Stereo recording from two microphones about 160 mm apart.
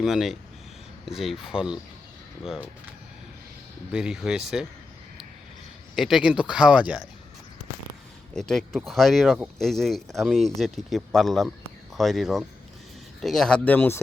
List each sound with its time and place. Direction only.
0.0 s speech: centre (ahead or behind)
3.9 s speech: 5° right (ahead or behind)
6.0 s speech: centre (ahead or behind)
8.4 s speech: 5° left (ahead or behind)